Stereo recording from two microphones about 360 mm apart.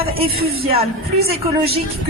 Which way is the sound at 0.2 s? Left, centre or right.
Right.